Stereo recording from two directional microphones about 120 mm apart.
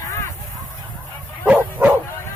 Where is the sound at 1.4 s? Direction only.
15° right (ahead or behind).